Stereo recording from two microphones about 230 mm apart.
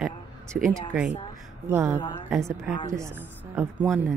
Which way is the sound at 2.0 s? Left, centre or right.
Left.